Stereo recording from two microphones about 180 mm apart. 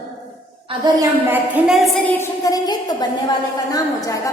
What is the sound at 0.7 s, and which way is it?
Speech, 30° right (ahead or behind).